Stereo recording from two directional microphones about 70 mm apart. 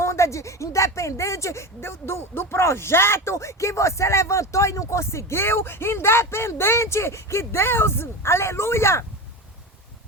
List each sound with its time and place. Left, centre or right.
0.0 s speech: left